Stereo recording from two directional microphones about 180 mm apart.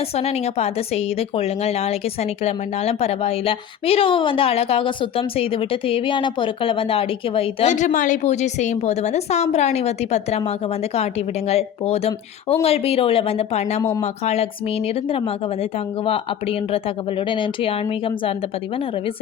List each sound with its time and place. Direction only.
0.2 s speech: 35° left (ahead or behind)
16.0 s speech: 30° left (ahead or behind)